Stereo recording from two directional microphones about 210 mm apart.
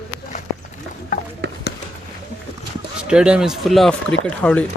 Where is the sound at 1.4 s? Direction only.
50° right (ahead or behind).